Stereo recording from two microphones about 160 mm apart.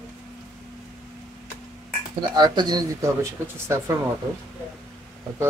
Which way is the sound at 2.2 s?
25° right (ahead or behind).